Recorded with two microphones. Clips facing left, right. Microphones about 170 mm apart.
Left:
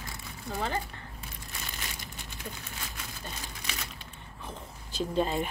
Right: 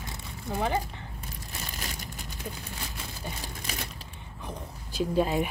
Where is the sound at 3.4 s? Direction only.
35° right (ahead or behind).